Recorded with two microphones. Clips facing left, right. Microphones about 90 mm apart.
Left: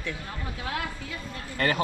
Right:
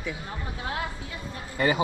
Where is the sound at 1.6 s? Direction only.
10° right (ahead or behind).